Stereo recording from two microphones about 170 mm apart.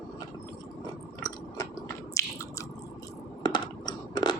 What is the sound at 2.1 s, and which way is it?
Chewing, 15° left (ahead or behind).